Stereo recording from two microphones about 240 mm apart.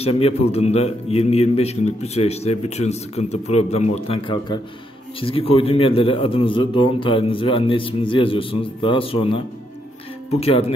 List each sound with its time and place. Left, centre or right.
0.0 s a man's voice: left